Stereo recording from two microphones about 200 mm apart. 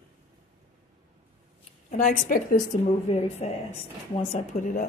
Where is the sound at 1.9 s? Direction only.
40° left (ahead or behind).